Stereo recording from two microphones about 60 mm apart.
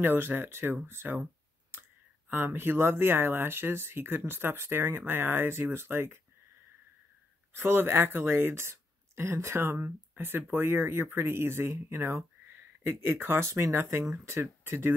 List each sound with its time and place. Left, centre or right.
0.0 s speech: right
7.5 s speech: right